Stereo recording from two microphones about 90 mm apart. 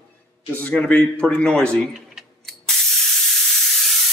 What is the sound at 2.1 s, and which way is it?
Spray, centre (ahead or behind).